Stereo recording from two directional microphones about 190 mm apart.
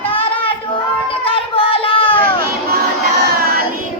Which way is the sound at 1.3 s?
30° left (ahead or behind).